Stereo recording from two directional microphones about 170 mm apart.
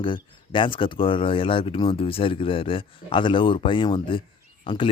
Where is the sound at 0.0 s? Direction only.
30° left (ahead or behind).